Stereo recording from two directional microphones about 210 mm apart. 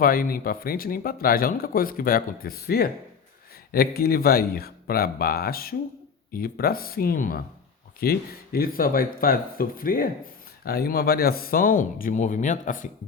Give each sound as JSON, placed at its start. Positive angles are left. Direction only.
{"t": 0.0, "sound": "speech", "side_deg": 45}